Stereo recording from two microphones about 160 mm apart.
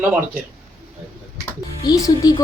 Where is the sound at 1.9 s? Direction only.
20° left (ahead or behind).